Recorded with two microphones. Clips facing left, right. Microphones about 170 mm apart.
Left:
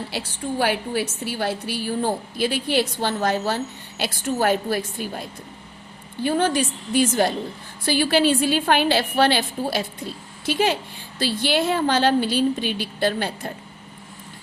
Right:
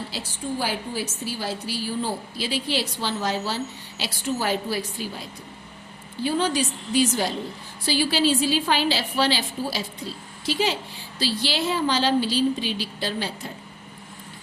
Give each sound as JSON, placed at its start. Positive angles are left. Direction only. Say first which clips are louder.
{"t": 0.1, "sound": "a woman's voice", "louder": "left 2 dB", "side_deg": 65}